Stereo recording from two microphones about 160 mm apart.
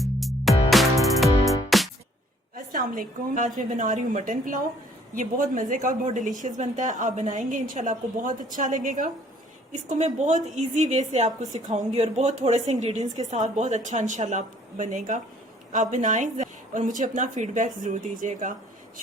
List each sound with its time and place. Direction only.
0.0 s music: centre (ahead or behind)
2.7 s a woman's voice: 55° right (ahead or behind)